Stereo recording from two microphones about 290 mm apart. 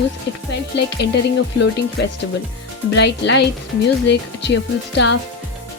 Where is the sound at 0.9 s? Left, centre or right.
Left.